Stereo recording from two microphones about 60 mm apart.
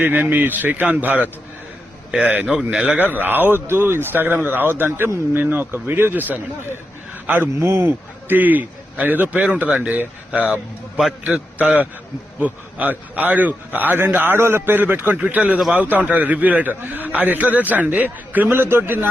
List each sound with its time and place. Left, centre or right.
0.0 s a man's voice: right
2.5 s a man's voice: centre
3.0 s a man's voice: right
18.4 s speech: right